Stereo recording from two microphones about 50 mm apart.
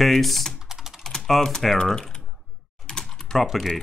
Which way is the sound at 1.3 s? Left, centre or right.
Centre.